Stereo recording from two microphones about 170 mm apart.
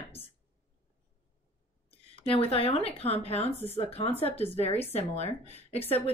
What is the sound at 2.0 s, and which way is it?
Speech, 35° left (ahead or behind).